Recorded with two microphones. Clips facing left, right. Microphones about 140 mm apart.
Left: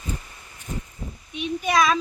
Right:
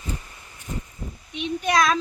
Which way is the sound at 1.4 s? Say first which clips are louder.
Even; 5° left (ahead or behind).